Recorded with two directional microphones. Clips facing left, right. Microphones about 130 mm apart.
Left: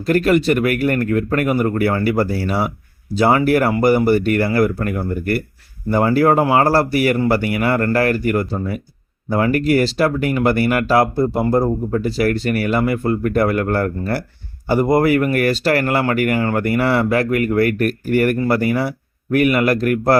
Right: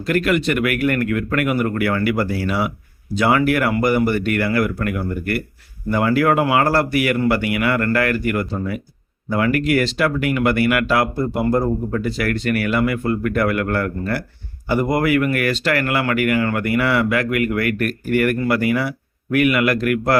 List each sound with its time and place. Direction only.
0.0 s speech: 35° left (ahead or behind)